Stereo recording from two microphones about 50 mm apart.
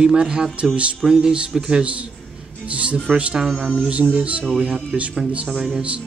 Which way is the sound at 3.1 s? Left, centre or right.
Right.